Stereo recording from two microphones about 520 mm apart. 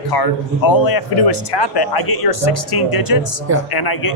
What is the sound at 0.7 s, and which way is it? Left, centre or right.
A man's voice, left.